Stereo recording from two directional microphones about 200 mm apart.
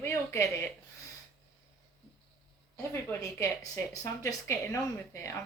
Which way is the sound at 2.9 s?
10° left (ahead or behind).